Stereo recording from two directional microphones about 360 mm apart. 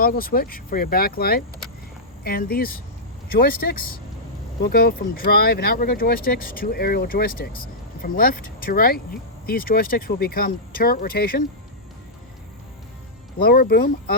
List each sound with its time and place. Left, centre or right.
0.0 s speech: left
13.4 s speech: left